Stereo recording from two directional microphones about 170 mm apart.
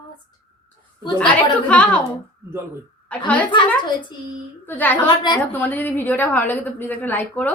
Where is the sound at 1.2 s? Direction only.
5° left (ahead or behind).